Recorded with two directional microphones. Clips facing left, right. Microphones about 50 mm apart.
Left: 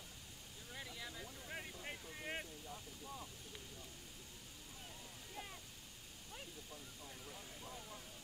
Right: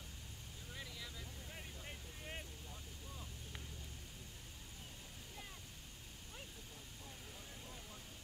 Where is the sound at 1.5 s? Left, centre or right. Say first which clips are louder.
Left 6 dB; left.